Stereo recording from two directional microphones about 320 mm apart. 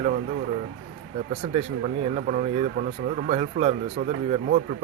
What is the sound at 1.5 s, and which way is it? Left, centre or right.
Speech, centre.